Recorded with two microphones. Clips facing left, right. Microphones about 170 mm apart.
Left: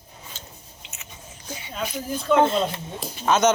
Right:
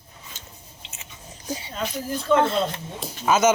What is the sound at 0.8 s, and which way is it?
Biting, 30° right (ahead or behind).